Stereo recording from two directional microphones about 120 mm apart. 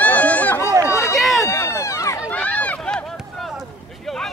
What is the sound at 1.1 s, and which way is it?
Run, centre (ahead or behind).